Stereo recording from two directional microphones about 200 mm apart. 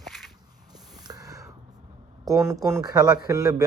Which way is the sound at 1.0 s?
20° right (ahead or behind).